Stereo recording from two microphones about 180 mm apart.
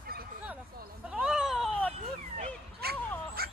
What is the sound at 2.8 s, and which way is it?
Dog, 60° right (ahead or behind).